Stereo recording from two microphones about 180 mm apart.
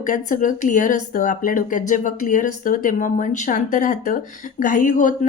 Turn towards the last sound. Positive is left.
turn(degrees=45)  # may be behind; listen again after turning